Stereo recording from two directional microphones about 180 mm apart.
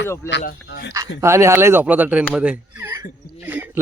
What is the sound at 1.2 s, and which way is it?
Speech, 15° right (ahead or behind).